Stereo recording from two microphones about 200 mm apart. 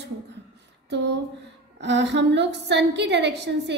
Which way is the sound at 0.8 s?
60° right (ahead or behind).